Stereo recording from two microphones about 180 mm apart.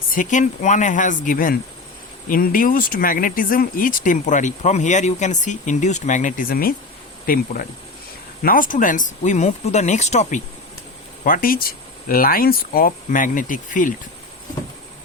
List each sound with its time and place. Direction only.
0.1 s speech: 45° left (ahead or behind)
8.4 s speech: 50° left (ahead or behind)